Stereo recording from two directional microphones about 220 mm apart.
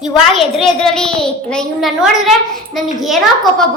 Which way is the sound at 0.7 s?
5° left (ahead or behind).